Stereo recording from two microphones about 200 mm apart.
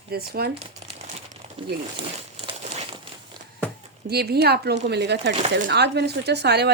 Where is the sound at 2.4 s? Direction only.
30° right (ahead or behind).